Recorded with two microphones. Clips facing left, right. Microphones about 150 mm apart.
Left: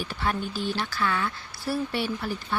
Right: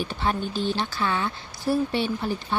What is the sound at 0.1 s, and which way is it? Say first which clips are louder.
Speech: right 2 dB; 25° right (ahead or behind).